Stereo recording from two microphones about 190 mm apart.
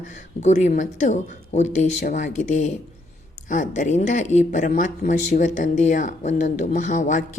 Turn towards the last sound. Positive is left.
turn(degrees=40)  # may be behind; listen again after turning